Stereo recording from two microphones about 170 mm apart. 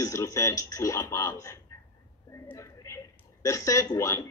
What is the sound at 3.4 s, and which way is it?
Speech, 20° left (ahead or behind).